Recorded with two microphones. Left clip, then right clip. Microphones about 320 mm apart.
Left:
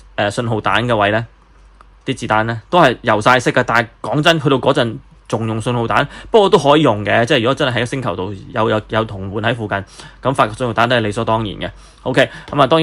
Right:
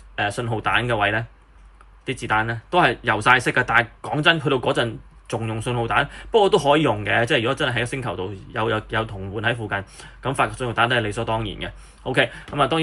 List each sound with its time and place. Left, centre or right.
0.2 s a man's voice: centre